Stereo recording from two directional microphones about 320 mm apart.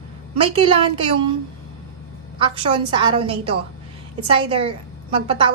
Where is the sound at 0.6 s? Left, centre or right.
Centre.